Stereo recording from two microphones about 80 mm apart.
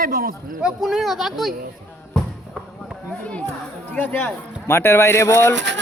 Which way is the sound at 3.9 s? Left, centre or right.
Centre.